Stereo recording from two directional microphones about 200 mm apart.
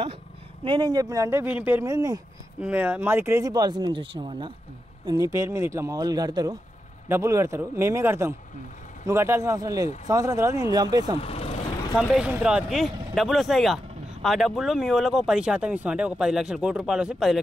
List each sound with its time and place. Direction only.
0.7 s a man's voice: 20° right (ahead or behind)
2.6 s a man's voice: 5° right (ahead or behind)
11.1 s speech: 30° left (ahead or behind)
12.0 s speech: centre (ahead or behind)